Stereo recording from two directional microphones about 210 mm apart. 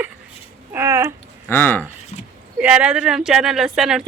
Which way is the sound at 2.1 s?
30° left (ahead or behind).